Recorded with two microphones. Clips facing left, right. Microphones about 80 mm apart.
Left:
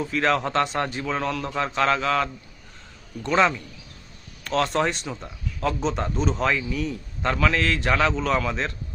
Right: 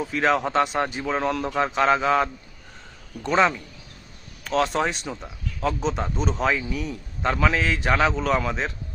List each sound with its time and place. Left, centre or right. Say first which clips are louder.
0.0 s speech: right 1 dB; centre
4.4 s speech: even; centre